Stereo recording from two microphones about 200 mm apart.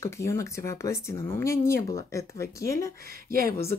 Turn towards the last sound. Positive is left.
turn(degrees=-45)  # may be behind; listen again after turning